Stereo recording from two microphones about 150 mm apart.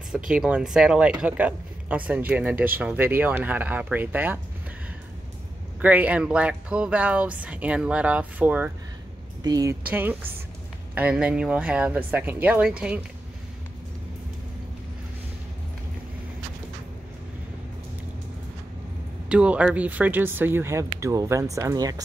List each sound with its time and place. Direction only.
0.3 s speech: 5° right (ahead or behind)
5.8 s speech: 10° right (ahead or behind)
9.4 s speech: 25° right (ahead or behind)
9.8 s speech: 10° right (ahead or behind)
19.2 s speech: 10° right (ahead or behind); by 22.0 s 25° right (ahead or behind)